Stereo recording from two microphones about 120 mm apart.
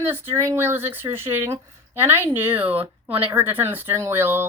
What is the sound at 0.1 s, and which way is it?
Speech, 20° right (ahead or behind).